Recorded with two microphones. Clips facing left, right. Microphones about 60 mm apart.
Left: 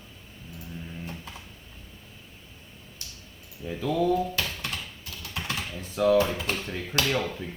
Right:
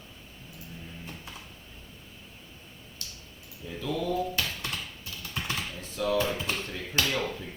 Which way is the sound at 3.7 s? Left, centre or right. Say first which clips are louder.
Left 4 dB; left.